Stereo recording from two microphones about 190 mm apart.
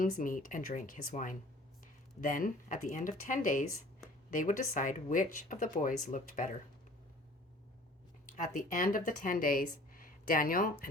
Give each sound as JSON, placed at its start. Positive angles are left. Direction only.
{"t": 0.0, "sound": "speech", "side_deg": 45}
{"t": 8.4, "sound": "speech", "side_deg": 45}